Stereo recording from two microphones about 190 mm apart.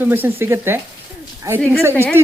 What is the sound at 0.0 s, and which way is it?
Speech, 10° right (ahead or behind).